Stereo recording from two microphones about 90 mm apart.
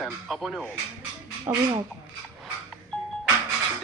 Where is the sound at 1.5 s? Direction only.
45° right (ahead or behind).